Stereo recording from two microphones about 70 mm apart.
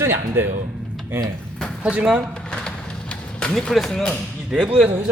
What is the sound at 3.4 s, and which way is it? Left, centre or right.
Speech, centre.